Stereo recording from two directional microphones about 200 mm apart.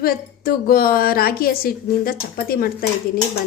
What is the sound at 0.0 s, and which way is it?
A woman's voice, 50° left (ahead or behind).